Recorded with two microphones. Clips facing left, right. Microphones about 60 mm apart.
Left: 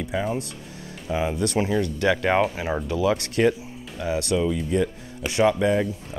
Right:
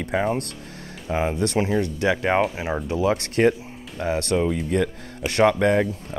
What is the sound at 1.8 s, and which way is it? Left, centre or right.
Speech, right.